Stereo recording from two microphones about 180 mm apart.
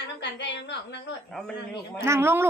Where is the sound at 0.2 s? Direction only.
75° left (ahead or behind).